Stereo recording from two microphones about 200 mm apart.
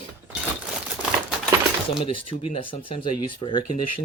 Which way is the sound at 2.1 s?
25° left (ahead or behind).